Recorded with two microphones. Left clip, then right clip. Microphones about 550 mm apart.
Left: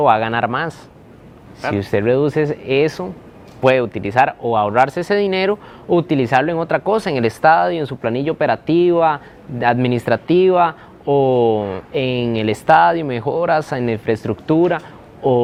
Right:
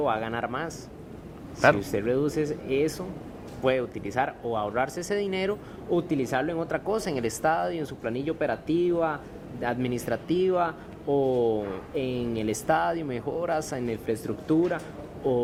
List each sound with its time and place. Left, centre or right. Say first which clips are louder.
0.0 s speech: left 13 dB; left
1.8 s speech: left 11 dB; left